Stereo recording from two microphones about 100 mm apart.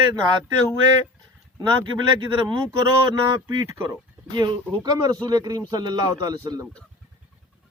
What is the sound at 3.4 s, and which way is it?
Speech, 35° right (ahead or behind).